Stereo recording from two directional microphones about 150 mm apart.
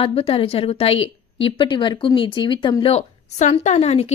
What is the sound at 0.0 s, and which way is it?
A woman's voice, 40° left (ahead or behind).